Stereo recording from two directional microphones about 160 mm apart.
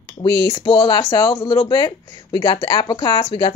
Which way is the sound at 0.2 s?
25° left (ahead or behind).